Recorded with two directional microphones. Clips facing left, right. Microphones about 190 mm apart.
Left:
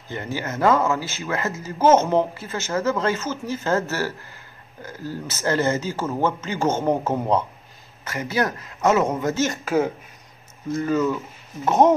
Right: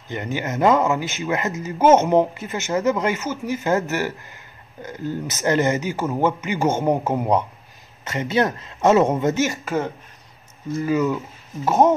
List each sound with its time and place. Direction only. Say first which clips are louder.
0.1 s speech: right 2 dB; 20° right (ahead or behind)
9.5 s speech: left 3 dB; centre (ahead or behind)
10.8 s speech: right 1 dB; 10° right (ahead or behind)